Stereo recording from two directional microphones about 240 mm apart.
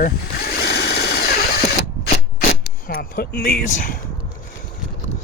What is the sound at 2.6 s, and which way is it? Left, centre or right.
Speech, left.